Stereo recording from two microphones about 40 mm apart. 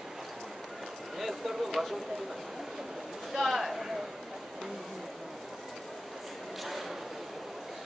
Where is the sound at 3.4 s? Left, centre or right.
Centre.